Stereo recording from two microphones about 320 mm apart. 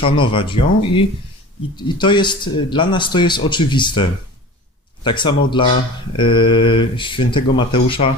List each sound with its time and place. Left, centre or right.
0.0 s speech: centre